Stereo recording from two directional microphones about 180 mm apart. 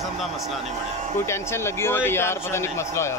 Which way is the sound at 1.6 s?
10° left (ahead or behind).